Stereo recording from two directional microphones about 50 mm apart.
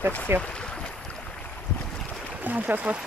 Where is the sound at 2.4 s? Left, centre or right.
Right.